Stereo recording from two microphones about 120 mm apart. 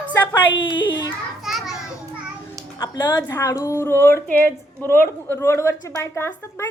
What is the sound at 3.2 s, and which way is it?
A woman's voice, 25° left (ahead or behind).